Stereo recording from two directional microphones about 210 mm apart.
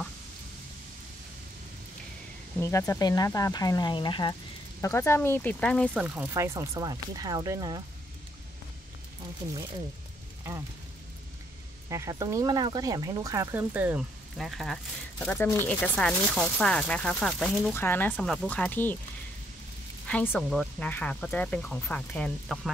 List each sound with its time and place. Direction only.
2.6 s speech: 15° left (ahead or behind); by 7.8 s 15° right (ahead or behind)
11.9 s speech: 15° right (ahead or behind); by 18.9 s 10° left (ahead or behind)
20.1 s speech: 5° left (ahead or behind)